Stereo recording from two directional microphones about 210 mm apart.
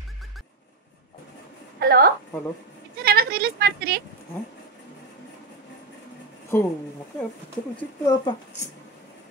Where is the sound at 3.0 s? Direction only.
45° right (ahead or behind).